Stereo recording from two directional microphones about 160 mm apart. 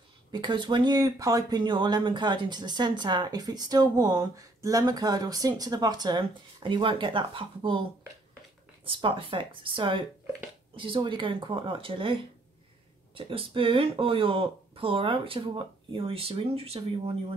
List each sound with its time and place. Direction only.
0.3 s speech: 30° right (ahead or behind)
8.8 s speech: 35° right (ahead or behind)